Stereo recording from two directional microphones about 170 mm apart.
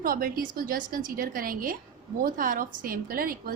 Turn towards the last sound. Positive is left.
turn(degrees=-60)  # may be behind; listen again after turning